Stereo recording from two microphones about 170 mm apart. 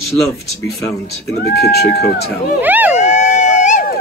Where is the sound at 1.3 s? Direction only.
70° left (ahead or behind).